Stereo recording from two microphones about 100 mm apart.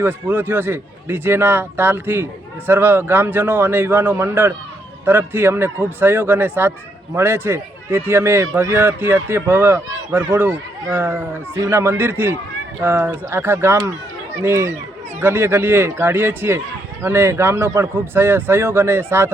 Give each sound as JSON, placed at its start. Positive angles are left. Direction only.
{"t": 0.0, "sound": "speech", "side_deg": -20}